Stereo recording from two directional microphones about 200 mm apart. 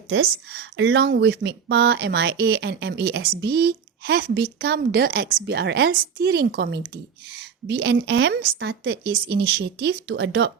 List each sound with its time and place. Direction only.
0.1 s a woman's voice: 55° right (ahead or behind)